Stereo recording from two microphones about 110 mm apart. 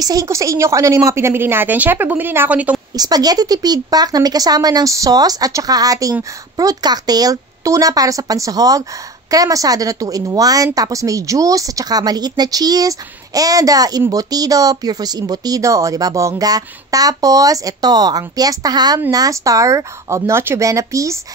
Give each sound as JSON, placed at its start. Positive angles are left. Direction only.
{"t": 0.0, "sound": "a woman's voice", "side_deg": -35}
{"t": 3.0, "sound": "speech", "side_deg": -35}